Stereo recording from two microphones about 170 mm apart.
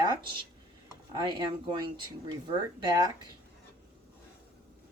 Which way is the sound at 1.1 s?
25° right (ahead or behind).